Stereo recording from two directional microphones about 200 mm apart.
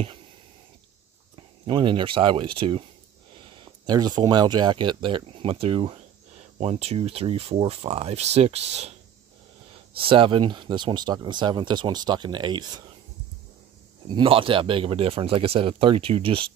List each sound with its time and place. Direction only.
1.3 s speech: 25° right (ahead or behind)
9.9 s speech: 25° right (ahead or behind)
14.0 s speech: 25° right (ahead or behind)